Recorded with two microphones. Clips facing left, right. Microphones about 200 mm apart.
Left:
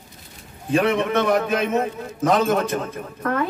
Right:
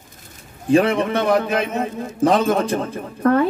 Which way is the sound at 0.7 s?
30° right (ahead or behind).